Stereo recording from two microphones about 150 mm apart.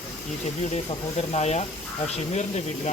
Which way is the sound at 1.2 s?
45° left (ahead or behind).